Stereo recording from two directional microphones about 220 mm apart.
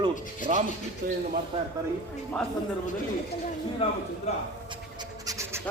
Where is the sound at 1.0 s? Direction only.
40° right (ahead or behind).